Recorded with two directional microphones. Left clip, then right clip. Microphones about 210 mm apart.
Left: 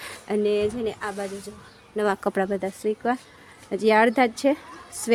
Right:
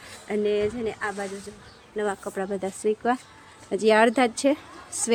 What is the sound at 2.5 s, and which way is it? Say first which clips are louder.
Speech: even; 5° left (ahead or behind).